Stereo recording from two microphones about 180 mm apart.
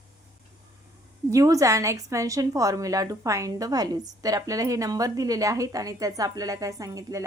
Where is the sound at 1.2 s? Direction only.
20° right (ahead or behind).